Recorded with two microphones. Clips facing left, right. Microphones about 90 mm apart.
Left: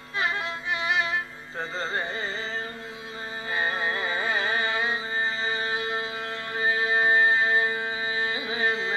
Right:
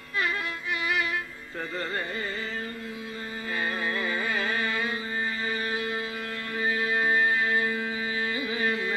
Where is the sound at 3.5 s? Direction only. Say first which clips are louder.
Left 2 dB; 25° left (ahead or behind).